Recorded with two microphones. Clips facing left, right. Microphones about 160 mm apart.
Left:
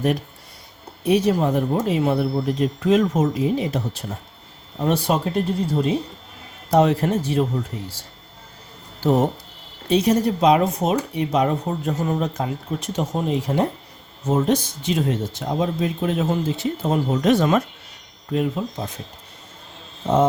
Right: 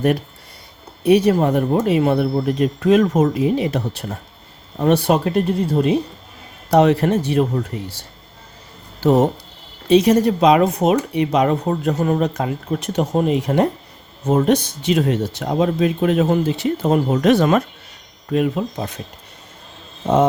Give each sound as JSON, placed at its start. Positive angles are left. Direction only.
{"t": 1.0, "sound": "speech", "side_deg": -65}
{"t": 9.0, "sound": "speech", "side_deg": -90}